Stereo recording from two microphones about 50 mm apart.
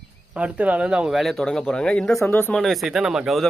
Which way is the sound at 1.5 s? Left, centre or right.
Centre.